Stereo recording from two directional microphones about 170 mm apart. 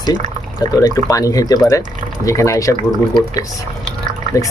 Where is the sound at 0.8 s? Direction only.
20° left (ahead or behind).